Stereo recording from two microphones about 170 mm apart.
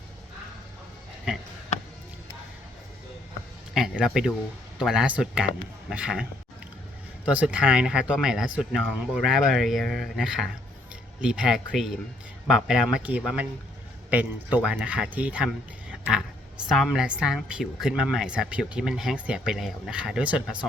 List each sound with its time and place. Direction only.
3.8 s a man's voice: 5° right (ahead or behind)
7.3 s speech: 5° right (ahead or behind)
15.9 s a sound: 5° right (ahead or behind)
16.6 s speech: centre (ahead or behind)